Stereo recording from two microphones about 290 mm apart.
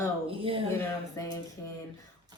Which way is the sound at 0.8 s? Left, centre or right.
Centre.